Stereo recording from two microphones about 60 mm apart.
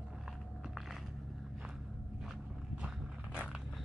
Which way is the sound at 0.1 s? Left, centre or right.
Centre.